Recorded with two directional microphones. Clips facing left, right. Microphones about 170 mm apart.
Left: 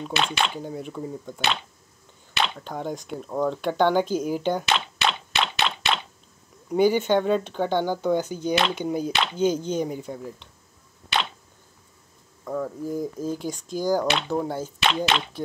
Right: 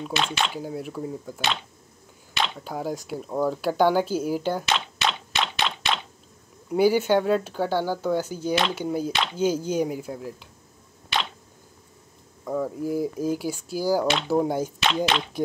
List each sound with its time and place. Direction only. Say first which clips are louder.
0.1 s speech: left 1 dB; 65° left (ahead or behind)
0.6 s speech: right 1 dB; 5° right (ahead or behind)
2.6 s speech: right 1 dB; 5° right (ahead or behind)
4.6 s a sound: left 1 dB; 65° left (ahead or behind)
6.7 s speech: even; 5° right (ahead or behind)
12.4 s speech: right 2 dB; 10° right (ahead or behind)
14.8 s speech: left 3 dB; 65° left (ahead or behind)